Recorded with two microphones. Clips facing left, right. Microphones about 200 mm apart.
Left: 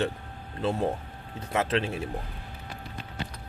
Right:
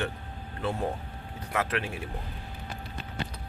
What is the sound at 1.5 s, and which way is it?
Speech, 25° left (ahead or behind).